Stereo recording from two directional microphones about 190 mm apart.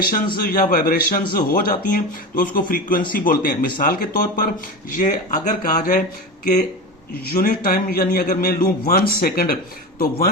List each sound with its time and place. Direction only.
0.3 s speech: 50° left (ahead or behind)